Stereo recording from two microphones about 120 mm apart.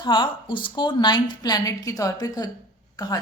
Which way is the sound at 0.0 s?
40° left (ahead or behind).